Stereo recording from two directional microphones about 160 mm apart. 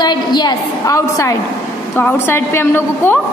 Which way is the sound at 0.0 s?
25° left (ahead or behind).